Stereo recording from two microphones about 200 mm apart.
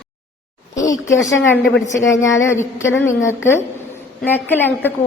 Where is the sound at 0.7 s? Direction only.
15° left (ahead or behind).